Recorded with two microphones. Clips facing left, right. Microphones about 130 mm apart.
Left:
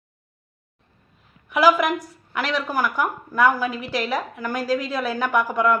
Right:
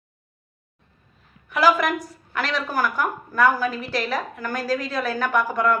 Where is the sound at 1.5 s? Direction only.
10° left (ahead or behind).